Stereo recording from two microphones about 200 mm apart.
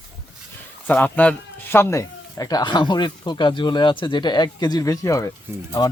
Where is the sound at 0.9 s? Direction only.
10° left (ahead or behind).